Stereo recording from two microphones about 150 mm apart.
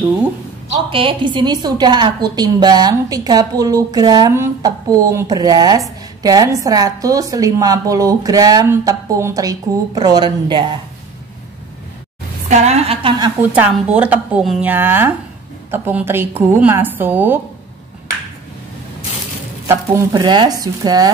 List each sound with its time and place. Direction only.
0.8 s a woman's voice: 35° right (ahead or behind)
12.4 s a woman's voice: 50° right (ahead or behind)
13.5 s a woman's voice: 10° right (ahead or behind)
19.7 s a woman's voice: 25° right (ahead or behind)